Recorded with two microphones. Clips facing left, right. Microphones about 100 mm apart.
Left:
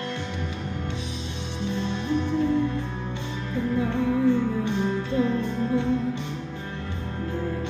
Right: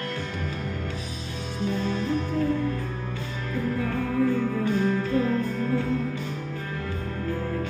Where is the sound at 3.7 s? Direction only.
25° left (ahead or behind).